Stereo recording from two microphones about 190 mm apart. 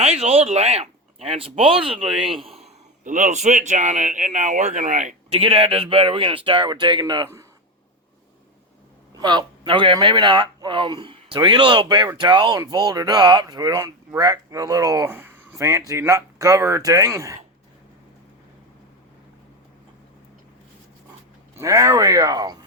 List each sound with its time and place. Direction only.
0.0 s speech: 35° right (ahead or behind)
2.6 s speech: 45° right (ahead or behind); by 7.3 s 25° right (ahead or behind)
9.1 s speech: 20° right (ahead or behind)
21.5 s speech: 15° right (ahead or behind)